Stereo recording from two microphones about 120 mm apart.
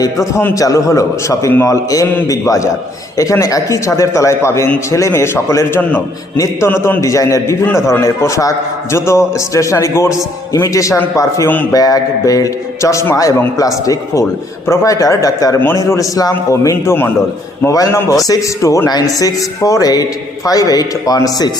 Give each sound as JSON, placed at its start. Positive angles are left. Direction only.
{"t": 0.0, "sound": "a man's voice", "side_deg": 25}